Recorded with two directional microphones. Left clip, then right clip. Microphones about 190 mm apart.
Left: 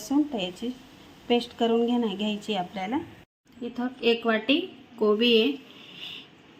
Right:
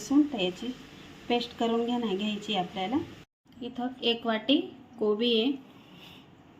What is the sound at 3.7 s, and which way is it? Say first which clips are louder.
Speech: left 4 dB; 30° left (ahead or behind).